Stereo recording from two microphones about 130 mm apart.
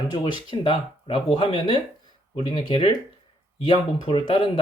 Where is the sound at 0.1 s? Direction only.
35° left (ahead or behind).